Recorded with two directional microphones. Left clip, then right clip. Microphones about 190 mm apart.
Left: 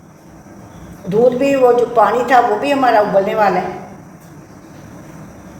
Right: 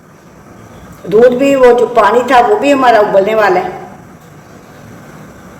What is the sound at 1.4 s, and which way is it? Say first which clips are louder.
A woman's voice: right 5 dB; 30° right (ahead or behind).